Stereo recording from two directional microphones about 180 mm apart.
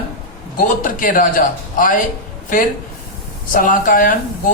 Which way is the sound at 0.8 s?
50° left (ahead or behind).